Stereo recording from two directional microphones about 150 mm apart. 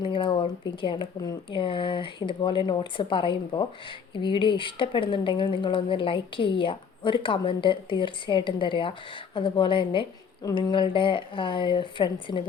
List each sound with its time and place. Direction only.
0.0 s speech: 35° left (ahead or behind)